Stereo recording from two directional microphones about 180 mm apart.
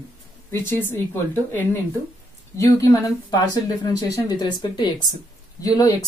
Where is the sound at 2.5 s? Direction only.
20° left (ahead or behind).